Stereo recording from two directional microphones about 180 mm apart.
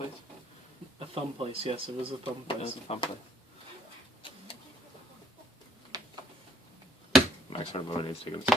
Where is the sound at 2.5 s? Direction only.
35° left (ahead or behind).